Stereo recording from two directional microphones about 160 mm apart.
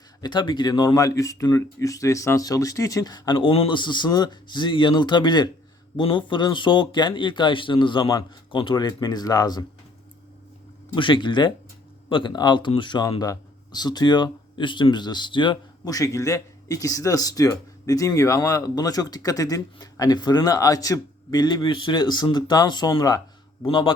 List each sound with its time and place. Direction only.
0.2 s speech: 25° left (ahead or behind)
10.9 s a man's voice: 30° left (ahead or behind)